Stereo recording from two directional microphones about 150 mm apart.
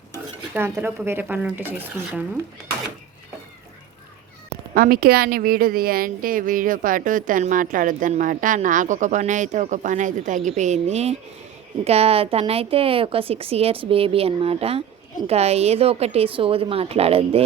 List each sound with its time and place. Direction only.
0.5 s speech: 15° right (ahead or behind)
4.7 s a woman's voice: 75° right (ahead or behind); by 17.4 s 40° right (ahead or behind)